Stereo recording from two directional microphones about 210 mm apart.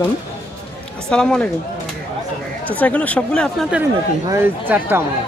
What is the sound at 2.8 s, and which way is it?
Speech, 5° left (ahead or behind).